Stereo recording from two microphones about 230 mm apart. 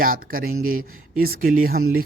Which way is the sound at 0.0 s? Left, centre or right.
Right.